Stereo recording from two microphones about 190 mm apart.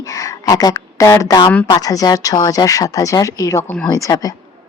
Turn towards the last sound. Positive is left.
turn(degrees=20)  # may be behind; listen again after turning